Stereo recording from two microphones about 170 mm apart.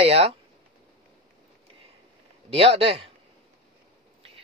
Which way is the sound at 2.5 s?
35° right (ahead or behind).